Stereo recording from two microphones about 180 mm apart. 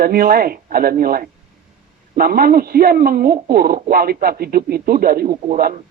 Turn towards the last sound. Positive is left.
turn(degrees=-50)  # may be behind; listen again after turning